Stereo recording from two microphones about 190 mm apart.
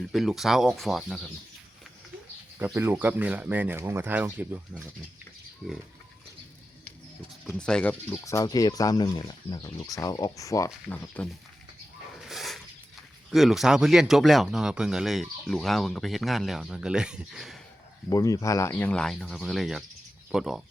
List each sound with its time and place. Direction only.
0.1 s speech: centre (ahead or behind)
2.6 s speech: 10° right (ahead or behind)
7.4 s speech: 5° left (ahead or behind)
12.1 s a sound: centre (ahead or behind)
13.3 s speech: centre (ahead or behind)
18.1 s speech: 20° left (ahead or behind); by 20.6 s centre (ahead or behind)